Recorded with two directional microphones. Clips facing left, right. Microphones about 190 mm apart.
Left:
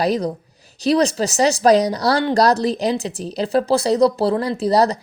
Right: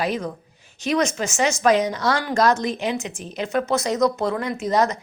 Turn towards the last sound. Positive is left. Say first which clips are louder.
# left 4 dB
turn(degrees=35)  # may be behind; listen again after turning